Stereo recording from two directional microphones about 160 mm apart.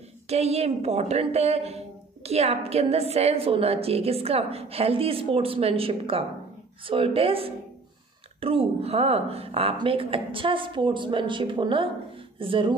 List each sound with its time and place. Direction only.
0.3 s a woman's voice: 40° right (ahead or behind)